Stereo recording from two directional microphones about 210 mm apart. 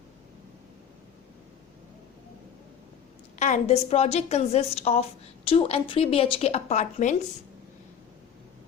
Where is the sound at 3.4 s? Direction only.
35° left (ahead or behind).